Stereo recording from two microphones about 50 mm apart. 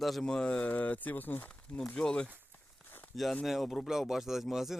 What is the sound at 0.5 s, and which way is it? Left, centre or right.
Speech, left.